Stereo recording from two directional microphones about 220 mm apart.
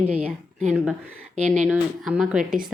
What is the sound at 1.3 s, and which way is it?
Speech, 35° right (ahead or behind).